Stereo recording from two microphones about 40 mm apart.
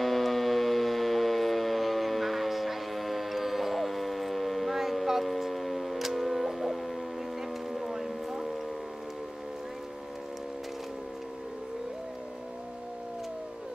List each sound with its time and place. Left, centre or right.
0.0 s siren: centre
4.9 s shofar: centre
7.7 s a sound: centre